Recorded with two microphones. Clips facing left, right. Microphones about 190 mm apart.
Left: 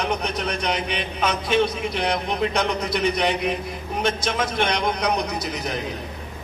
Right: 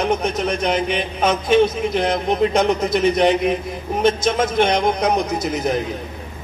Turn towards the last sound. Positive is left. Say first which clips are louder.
# right 7 dB
turn(degrees=-50)  # may be behind; listen again after turning